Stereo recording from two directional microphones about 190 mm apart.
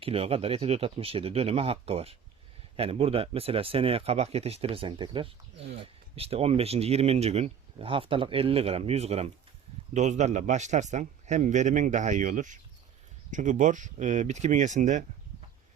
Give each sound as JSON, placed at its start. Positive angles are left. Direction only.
{"t": 0.0, "sound": "speech", "side_deg": -30}